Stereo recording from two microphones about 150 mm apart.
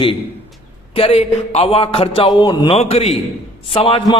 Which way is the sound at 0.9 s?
40° left (ahead or behind).